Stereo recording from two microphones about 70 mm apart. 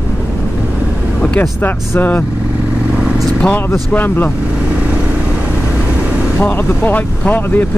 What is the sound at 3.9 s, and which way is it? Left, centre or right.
Speech, left.